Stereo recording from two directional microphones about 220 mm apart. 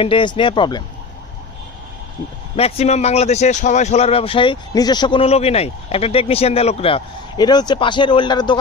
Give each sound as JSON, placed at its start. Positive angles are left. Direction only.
{"t": 0.0, "sound": "speech", "side_deg": 20}
{"t": 2.5, "sound": "speech", "side_deg": 30}